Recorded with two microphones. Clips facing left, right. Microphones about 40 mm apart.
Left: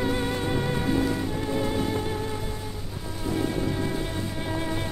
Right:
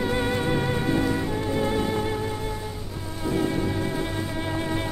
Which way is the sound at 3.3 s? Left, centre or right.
Centre.